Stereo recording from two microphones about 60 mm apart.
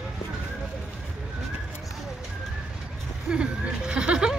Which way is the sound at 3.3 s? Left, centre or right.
Centre.